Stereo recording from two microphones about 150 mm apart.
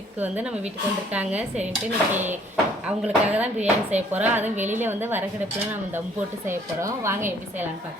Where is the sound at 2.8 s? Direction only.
10° right (ahead or behind).